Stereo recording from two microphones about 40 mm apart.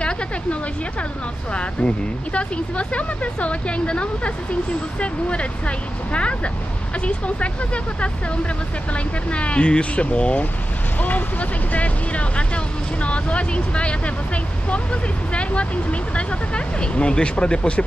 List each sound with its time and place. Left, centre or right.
1.5 s speech: left
11.0 s speech: left